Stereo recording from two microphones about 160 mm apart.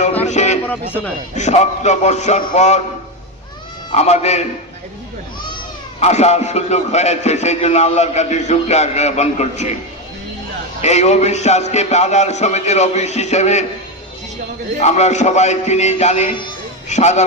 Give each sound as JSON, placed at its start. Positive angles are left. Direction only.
{"t": 0.3, "sound": "music", "side_deg": 45}
{"t": 0.6, "sound": "speech", "side_deg": 10}
{"t": 1.4, "sound": "a man's voice", "side_deg": 45}
{"t": 3.9, "sound": "a man's voice", "side_deg": 45}
{"t": 6.0, "sound": "a man's voice", "side_deg": 45}
{"t": 10.8, "sound": "a man's voice", "side_deg": 45}
{"t": 14.8, "sound": "a man's voice", "side_deg": 45}